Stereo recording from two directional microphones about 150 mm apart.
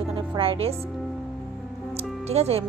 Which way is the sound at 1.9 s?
45° right (ahead or behind).